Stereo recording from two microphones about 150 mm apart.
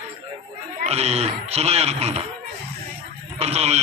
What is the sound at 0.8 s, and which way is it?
A man's voice, 45° right (ahead or behind).